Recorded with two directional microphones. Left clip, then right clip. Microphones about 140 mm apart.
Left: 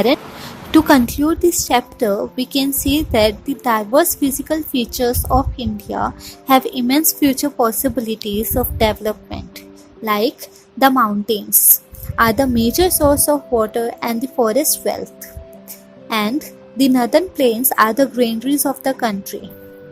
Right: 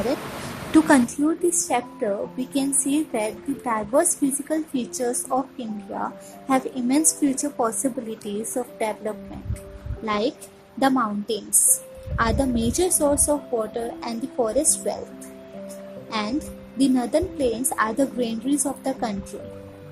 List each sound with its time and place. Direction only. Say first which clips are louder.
0.7 s a woman's voice: left 5 dB; 45° left (ahead or behind)
16.0 s a woman's voice: left 8 dB; 50° left (ahead or behind)